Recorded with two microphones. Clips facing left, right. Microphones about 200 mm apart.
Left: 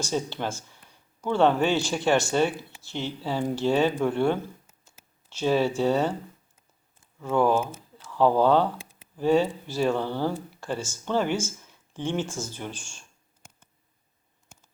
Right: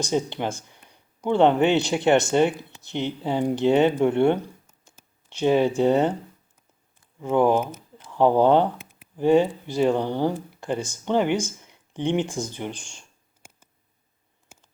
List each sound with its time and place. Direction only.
0.0 s speech: 15° right (ahead or behind)
0.7 s a sound: 15° right (ahead or behind)
1.6 s speech: 20° right (ahead or behind)
7.2 s speech: 20° right (ahead or behind)